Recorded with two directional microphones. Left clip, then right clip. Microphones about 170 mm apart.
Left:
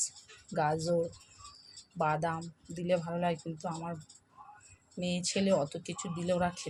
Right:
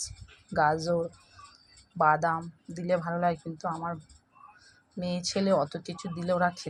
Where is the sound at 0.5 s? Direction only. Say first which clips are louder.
Right 5 dB; 10° right (ahead or behind).